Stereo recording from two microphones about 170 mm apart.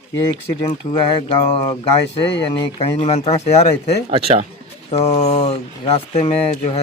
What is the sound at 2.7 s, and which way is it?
Speech, 35° left (ahead or behind).